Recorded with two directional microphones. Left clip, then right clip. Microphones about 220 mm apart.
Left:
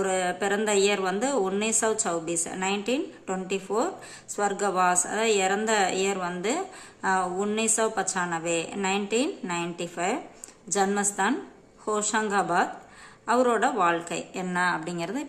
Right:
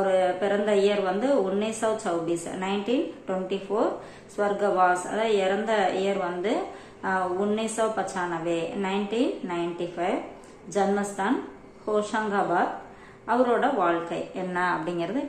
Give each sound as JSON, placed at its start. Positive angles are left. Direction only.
{"t": 0.0, "sound": "speech", "side_deg": 30}